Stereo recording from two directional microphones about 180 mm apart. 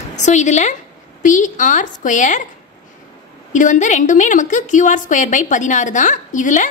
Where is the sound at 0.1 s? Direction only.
40° left (ahead or behind).